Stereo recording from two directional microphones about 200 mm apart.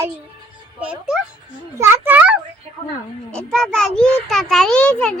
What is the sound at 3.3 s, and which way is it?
A child's voice, 5° left (ahead or behind).